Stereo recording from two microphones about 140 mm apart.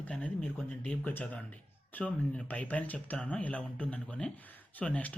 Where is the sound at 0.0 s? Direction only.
10° left (ahead or behind).